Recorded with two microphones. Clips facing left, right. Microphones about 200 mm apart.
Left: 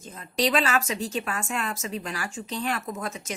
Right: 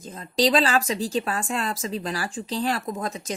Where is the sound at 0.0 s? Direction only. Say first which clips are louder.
Right 4 dB; 35° right (ahead or behind).